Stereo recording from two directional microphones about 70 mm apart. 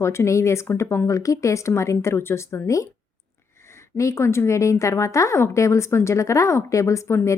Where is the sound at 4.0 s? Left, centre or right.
Left.